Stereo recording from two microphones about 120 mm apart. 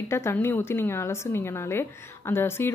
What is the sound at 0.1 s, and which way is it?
A woman's voice, 20° left (ahead or behind).